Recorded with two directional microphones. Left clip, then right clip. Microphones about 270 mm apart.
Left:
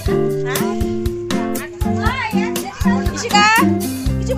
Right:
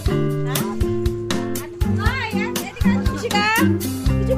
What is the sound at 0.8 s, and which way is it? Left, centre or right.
Music, centre.